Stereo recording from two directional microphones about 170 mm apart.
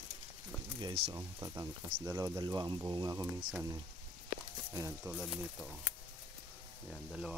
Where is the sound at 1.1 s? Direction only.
20° right (ahead or behind).